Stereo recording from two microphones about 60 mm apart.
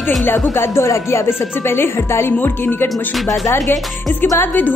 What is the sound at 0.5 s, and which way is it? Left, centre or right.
Music, left.